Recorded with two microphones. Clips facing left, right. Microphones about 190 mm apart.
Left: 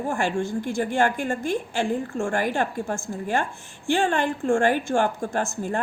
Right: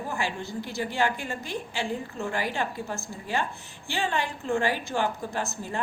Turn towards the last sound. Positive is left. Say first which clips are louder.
# left 5 dB
turn(degrees=50)  # may be behind; listen again after turning